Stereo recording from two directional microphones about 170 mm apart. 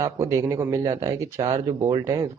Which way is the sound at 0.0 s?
20° right (ahead or behind).